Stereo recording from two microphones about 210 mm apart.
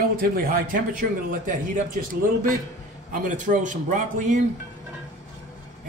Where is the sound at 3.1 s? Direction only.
35° right (ahead or behind).